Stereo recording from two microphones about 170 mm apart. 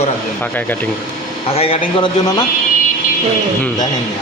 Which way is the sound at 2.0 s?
25° left (ahead or behind).